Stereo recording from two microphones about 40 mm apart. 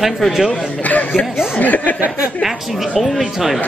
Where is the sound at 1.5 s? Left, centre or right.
Left.